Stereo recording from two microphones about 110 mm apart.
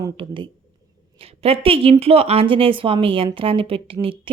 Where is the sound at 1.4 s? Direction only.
60° right (ahead or behind).